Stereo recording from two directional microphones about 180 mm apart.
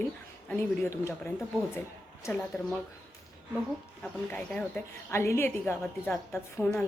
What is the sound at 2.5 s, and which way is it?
Speech, 15° left (ahead or behind).